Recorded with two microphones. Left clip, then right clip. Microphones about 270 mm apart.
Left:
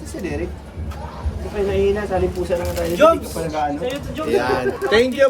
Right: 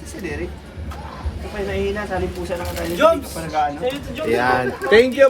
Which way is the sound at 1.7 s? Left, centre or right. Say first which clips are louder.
Left 4 dB; centre.